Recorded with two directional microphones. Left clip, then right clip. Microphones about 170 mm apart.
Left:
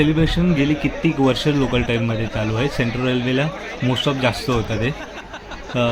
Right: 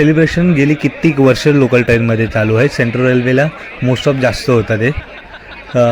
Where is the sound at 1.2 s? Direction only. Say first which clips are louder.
Right 8 dB; 50° right (ahead or behind).